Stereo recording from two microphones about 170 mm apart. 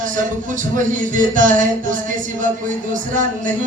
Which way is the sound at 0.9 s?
50° right (ahead or behind).